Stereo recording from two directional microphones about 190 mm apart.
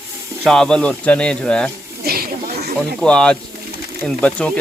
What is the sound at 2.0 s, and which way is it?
Snake, 50° right (ahead or behind).